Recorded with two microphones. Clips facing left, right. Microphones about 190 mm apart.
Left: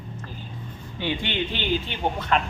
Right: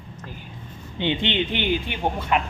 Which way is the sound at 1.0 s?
20° right (ahead or behind).